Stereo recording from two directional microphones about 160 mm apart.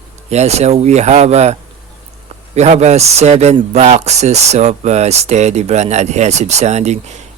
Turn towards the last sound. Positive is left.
turn(degrees=-45)  # may be behind; listen again after turning